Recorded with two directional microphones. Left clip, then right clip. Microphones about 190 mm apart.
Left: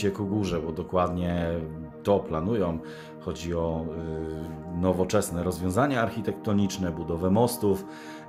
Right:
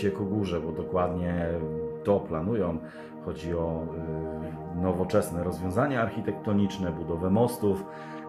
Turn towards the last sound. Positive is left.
turn(degrees=30)  # may be behind; listen again after turning